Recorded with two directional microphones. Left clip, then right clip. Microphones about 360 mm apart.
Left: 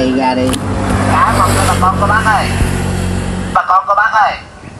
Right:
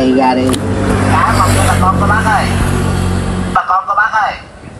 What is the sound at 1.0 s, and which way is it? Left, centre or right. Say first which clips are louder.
Vehicle: left 1 dB; left.